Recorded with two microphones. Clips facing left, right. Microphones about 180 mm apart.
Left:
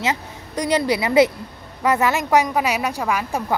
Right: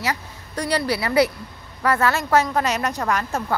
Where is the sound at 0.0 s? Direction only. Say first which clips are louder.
Left 3 dB; 20° left (ahead or behind).